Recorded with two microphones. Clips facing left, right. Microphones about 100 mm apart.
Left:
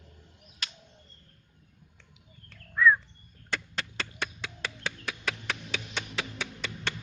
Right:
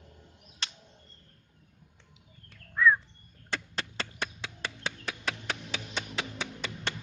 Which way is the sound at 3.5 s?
30° right (ahead or behind).